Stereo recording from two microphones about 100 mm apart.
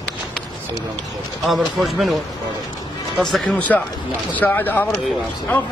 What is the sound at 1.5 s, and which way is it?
Speech, centre (ahead or behind).